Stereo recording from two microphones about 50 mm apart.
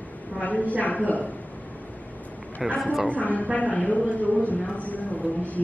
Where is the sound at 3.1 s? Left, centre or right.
Left.